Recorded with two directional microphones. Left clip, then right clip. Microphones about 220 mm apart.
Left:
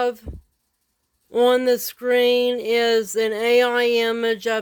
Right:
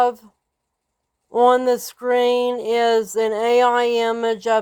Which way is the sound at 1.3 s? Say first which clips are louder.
Right 2 dB; 25° left (ahead or behind).